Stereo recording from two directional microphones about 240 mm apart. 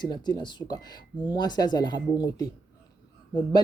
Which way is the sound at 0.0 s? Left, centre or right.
Centre.